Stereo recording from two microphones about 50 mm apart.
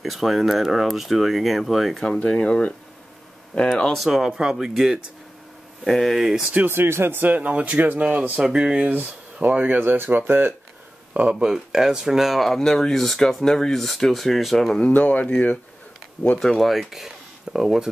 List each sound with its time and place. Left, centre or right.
0.0 s speech: centre
2.2 s speech: centre
4.0 s speech: centre
5.9 s speech: centre
6.1 s speech: centre
6.7 s speech: right
7.2 s speech: right
8.3 s speech: centre
8.8 s speech: right
9.8 s speech: right
11.3 s speech: centre
14.9 s speech: left
16.3 s speech: centre